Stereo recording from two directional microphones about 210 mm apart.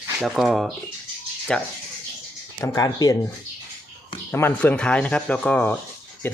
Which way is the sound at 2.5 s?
15° left (ahead or behind).